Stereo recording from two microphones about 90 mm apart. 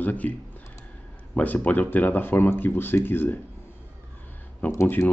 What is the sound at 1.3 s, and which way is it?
Speech, 20° left (ahead or behind).